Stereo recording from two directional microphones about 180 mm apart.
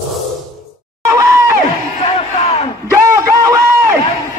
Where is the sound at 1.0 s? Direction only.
15° right (ahead or behind).